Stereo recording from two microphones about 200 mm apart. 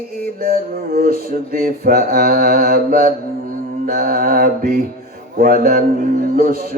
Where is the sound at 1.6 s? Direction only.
50° right (ahead or behind).